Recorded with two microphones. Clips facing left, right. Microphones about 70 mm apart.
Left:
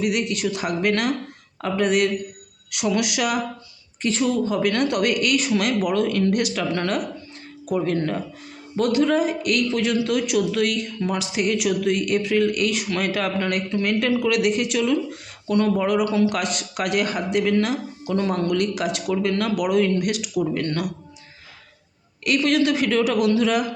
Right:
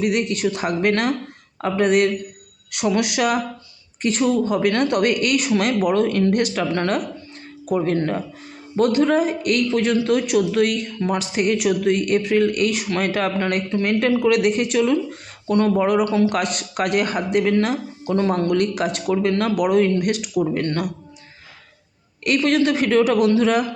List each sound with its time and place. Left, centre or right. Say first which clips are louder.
0.0 s speech: right 3 dB; right
22.2 s speech: right 2 dB; right